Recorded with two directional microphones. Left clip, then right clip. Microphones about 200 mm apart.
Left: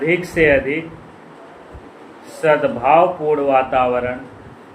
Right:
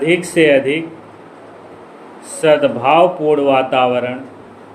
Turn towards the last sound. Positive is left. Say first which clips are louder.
# right 2 dB
turn(degrees=-35)  # may be behind; listen again after turning